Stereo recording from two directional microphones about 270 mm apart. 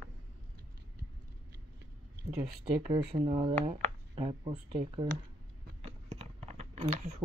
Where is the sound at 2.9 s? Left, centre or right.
Centre.